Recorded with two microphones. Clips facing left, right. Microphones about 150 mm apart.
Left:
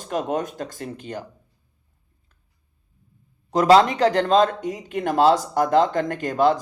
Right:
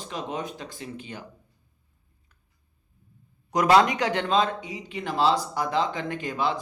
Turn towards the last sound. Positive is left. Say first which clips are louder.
# left 8 dB
turn(degrees=45)  # may be behind; listen again after turning